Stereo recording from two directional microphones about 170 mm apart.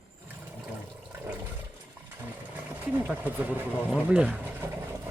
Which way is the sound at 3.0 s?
10° right (ahead or behind).